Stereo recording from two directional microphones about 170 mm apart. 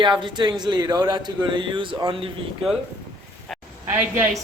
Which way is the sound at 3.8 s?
10° right (ahead or behind).